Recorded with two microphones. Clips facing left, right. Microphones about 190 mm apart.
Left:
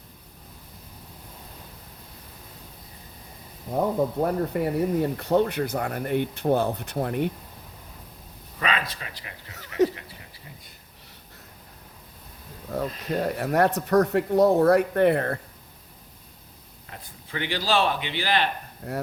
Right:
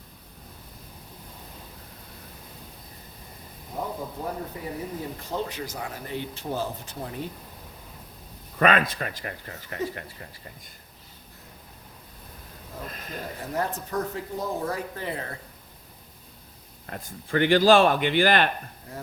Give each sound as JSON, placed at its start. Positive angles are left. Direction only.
{"t": 4.2, "sound": "speech", "side_deg": 65}
{"t": 8.5, "sound": "speech", "side_deg": -50}
{"t": 9.8, "sound": "speech", "side_deg": 80}
{"t": 12.7, "sound": "speech", "side_deg": 70}
{"t": 16.8, "sound": "speech", "side_deg": -50}